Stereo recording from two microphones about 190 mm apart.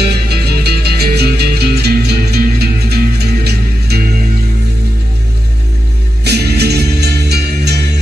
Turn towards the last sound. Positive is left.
turn(degrees=-60)  # may be behind; listen again after turning